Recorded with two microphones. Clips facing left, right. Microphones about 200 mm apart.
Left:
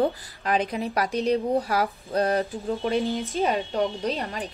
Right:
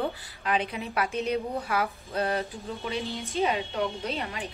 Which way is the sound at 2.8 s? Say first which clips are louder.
Left 7 dB; 50° left (ahead or behind).